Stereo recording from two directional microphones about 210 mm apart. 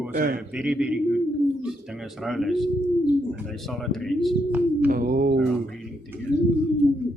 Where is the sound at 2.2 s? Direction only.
Centre (ahead or behind).